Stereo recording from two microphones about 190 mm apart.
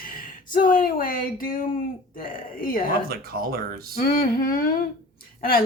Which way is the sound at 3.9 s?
50° left (ahead or behind).